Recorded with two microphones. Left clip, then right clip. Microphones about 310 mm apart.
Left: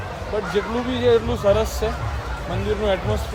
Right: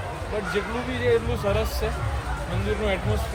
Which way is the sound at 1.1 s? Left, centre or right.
Centre.